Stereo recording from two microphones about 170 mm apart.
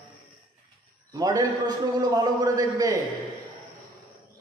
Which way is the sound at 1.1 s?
25° right (ahead or behind).